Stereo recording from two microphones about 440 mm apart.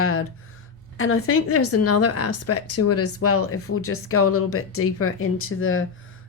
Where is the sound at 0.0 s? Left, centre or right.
Left.